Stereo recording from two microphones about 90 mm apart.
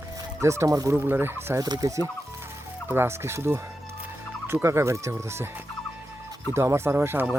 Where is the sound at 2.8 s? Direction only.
25° right (ahead or behind).